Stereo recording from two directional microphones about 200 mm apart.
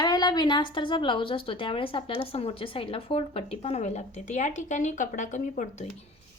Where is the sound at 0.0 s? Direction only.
20° left (ahead or behind).